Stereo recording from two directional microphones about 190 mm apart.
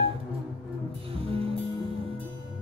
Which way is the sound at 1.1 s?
30° right (ahead or behind).